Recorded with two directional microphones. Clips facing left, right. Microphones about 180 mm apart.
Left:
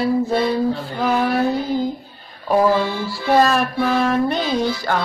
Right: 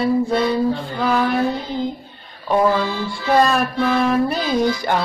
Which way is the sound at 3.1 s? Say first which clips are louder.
Left 1 dB; 5° left (ahead or behind).